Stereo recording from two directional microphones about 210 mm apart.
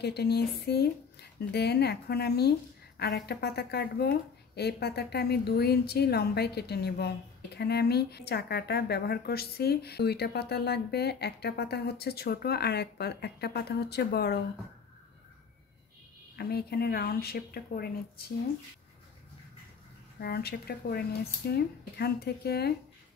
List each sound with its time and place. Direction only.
0.0 s a woman's voice: 50° left (ahead or behind)
16.3 s a woman's voice: 50° left (ahead or behind)
20.2 s a woman's voice: 50° left (ahead or behind)